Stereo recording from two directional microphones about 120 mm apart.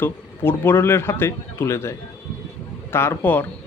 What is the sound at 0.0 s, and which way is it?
A man's voice, 20° left (ahead or behind).